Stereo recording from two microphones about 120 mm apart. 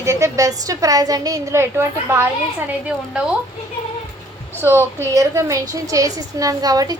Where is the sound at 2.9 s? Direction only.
10° right (ahead or behind).